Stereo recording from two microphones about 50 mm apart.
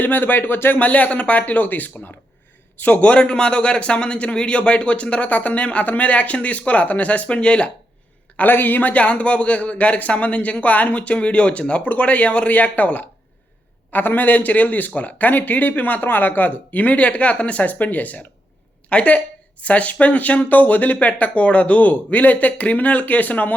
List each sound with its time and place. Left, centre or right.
0.0 s speech: left
0.8 s a man's voice: left
8.4 s a man's voice: left